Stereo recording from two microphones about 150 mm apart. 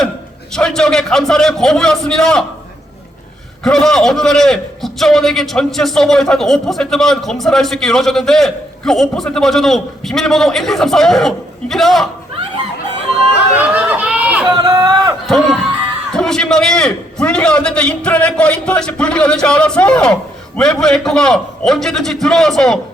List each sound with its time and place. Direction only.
0.5 s a man's voice: 5° left (ahead or behind)
3.6 s a man's voice: centre (ahead or behind)
13.3 s a sound: 10° right (ahead or behind)
14.5 s speech: 25° right (ahead or behind)
16.1 s a man's voice: 5° left (ahead or behind)